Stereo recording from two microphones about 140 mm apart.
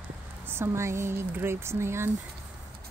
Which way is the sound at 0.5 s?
20° right (ahead or behind).